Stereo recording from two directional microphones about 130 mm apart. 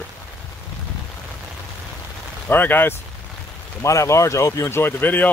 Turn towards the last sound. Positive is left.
turn(degrees=15)  # may be behind; listen again after turning